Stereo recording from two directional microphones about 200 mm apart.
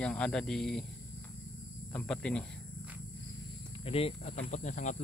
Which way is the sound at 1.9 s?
5° left (ahead or behind).